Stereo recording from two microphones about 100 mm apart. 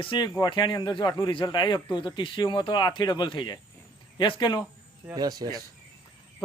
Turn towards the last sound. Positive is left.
turn(degrees=-40)  # may be behind; listen again after turning